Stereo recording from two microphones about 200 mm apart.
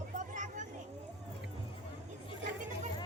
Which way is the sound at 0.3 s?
40° right (ahead or behind).